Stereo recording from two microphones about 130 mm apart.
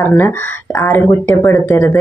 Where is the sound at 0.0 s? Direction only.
15° left (ahead or behind).